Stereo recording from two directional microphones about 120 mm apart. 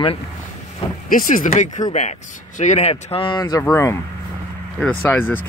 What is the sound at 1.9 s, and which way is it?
Speech, 70° left (ahead or behind).